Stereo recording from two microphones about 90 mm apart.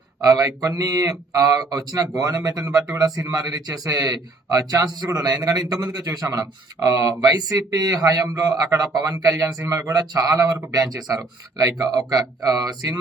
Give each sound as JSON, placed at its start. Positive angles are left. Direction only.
{"t": 0.2, "sound": "a man's voice", "side_deg": -40}